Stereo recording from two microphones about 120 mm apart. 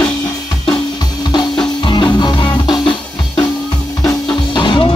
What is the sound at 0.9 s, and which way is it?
Music, 35° left (ahead or behind).